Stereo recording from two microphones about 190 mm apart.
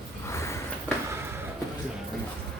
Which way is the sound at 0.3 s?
15° left (ahead or behind).